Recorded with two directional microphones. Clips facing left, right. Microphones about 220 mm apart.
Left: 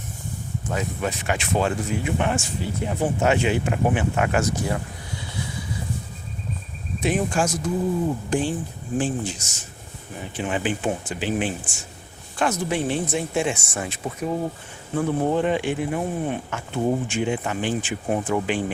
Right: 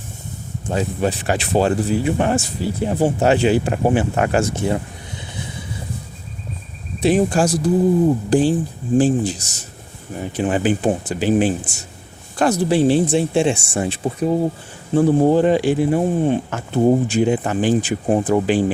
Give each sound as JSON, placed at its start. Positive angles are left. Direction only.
{"t": 0.7, "sound": "speech", "side_deg": -30}
{"t": 7.0, "sound": "speech", "side_deg": -35}